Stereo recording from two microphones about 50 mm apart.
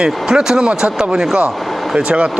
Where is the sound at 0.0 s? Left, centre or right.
Centre.